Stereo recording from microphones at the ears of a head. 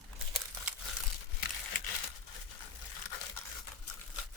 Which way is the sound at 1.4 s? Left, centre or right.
Left.